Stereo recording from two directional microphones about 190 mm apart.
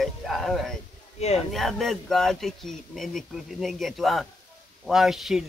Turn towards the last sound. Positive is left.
turn(degrees=0)  # may be behind; listen again after turning